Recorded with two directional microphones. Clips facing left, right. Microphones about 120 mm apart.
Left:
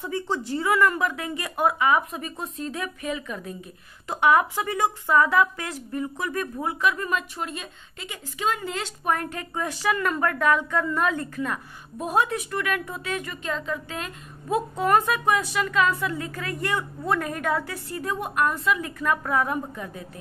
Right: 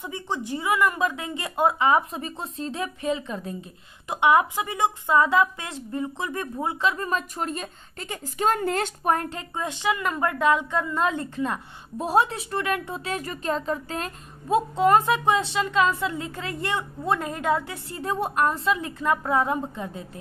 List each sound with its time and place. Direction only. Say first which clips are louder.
0.0 s a woman's voice: left 3 dB; 15° right (ahead or behind); by 8.9 s 50° right (ahead or behind)
9.0 s a woman's voice: left 2 dB; 30° right (ahead or behind)
14.5 s a woman's voice: right 3 dB; 25° right (ahead or behind)